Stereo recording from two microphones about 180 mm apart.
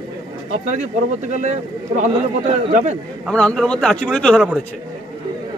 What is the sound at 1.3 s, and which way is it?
Speech, 40° right (ahead or behind).